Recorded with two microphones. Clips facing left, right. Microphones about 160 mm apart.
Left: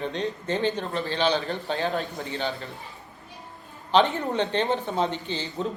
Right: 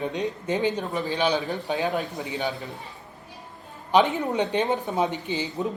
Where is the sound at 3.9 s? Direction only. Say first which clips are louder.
Right 1 dB; 15° right (ahead or behind).